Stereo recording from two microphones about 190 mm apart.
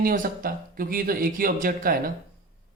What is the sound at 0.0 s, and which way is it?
Speech, 45° right (ahead or behind).